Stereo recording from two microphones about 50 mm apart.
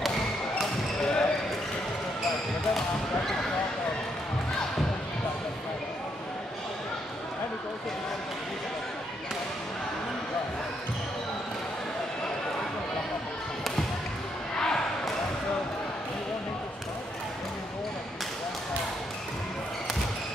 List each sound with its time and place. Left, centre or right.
1.0 s basketball bounce: centre
14.6 s basketball bounce: centre